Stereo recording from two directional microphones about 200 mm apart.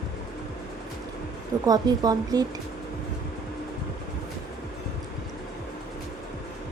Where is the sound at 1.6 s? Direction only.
20° right (ahead or behind).